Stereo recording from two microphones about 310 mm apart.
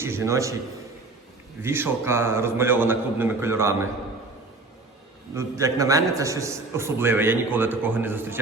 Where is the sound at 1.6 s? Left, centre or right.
Centre.